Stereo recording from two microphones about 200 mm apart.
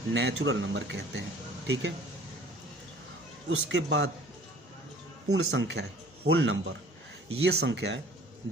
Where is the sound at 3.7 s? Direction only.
65° right (ahead or behind).